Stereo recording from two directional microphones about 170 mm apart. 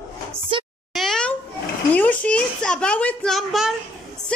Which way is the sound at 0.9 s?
Centre (ahead or behind).